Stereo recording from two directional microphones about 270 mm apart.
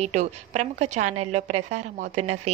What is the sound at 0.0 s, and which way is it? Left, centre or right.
A woman's voice, right.